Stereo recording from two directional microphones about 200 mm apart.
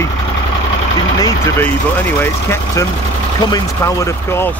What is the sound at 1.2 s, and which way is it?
Speech, 15° left (ahead or behind).